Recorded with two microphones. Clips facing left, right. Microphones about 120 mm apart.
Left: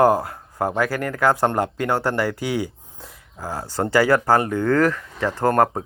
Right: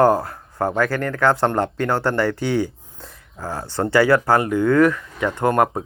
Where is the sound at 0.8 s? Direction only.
30° left (ahead or behind).